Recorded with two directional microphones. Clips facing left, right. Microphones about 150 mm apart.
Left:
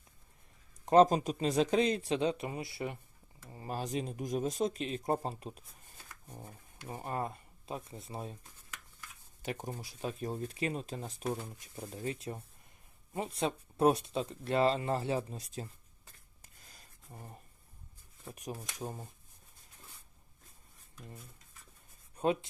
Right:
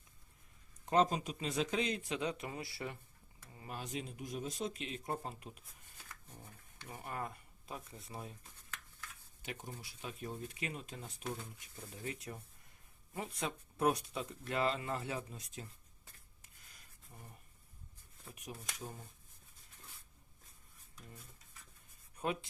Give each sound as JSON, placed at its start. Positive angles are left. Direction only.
{"t": 0.9, "sound": "speech", "side_deg": 40}
{"t": 3.4, "sound": "speech", "side_deg": 35}
{"t": 6.8, "sound": "speech", "side_deg": 35}
{"t": 9.4, "sound": "speech", "side_deg": 45}
{"t": 16.4, "sound": "a sound", "side_deg": 35}
{"t": 18.3, "sound": "speech", "side_deg": 40}
{"t": 21.2, "sound": "a sound", "side_deg": 0}
{"t": 22.2, "sound": "speech", "side_deg": 25}